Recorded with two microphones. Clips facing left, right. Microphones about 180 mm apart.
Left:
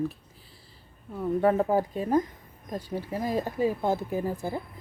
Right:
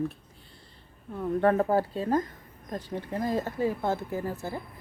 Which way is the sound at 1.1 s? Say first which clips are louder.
Even; 5° left (ahead or behind).